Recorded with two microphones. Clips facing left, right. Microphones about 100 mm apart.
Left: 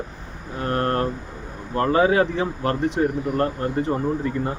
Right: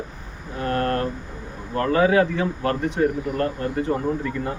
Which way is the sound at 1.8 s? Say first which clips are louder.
Even; 30° left (ahead or behind).